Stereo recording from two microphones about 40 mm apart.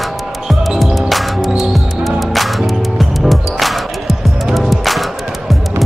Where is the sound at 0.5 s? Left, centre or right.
Centre.